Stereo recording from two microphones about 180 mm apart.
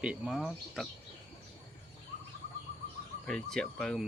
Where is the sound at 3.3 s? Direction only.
5° left (ahead or behind).